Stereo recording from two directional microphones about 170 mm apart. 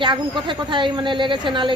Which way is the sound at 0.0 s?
30° right (ahead or behind).